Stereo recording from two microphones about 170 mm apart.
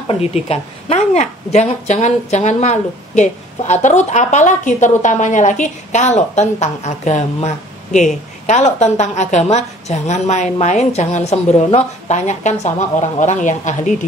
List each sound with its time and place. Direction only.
0.1 s a woman's voice: 35° left (ahead or behind)